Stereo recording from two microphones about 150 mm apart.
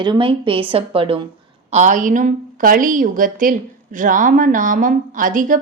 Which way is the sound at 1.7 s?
55° right (ahead or behind).